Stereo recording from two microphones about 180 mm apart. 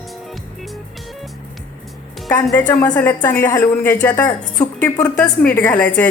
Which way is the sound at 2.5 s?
10° left (ahead or behind).